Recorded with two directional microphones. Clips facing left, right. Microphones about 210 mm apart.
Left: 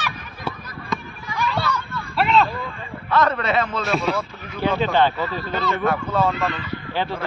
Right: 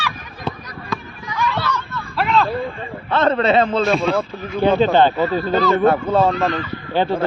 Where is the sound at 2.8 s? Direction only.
30° right (ahead or behind).